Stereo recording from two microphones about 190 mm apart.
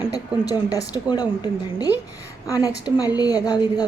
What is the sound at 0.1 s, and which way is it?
A woman's voice, 20° left (ahead or behind).